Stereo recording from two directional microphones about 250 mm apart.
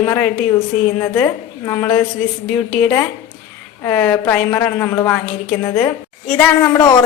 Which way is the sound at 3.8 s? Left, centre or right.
Centre.